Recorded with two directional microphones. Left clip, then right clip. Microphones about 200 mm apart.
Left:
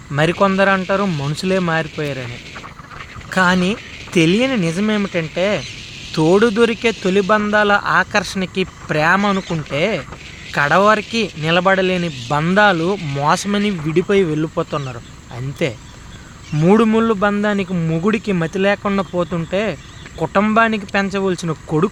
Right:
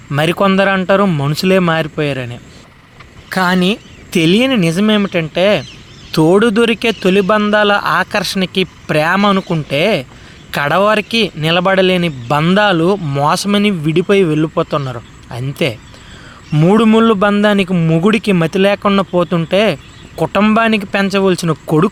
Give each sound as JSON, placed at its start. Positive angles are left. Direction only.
{"t": 0.1, "sound": "a man's voice", "side_deg": -30}
{"t": 3.2, "sound": "a man's voice", "side_deg": -20}